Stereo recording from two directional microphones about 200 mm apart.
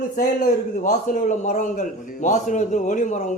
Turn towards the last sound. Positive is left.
turn(degrees=40)  # may be behind; listen again after turning